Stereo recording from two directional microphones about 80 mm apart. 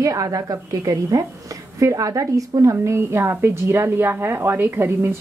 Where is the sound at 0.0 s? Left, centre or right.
Right.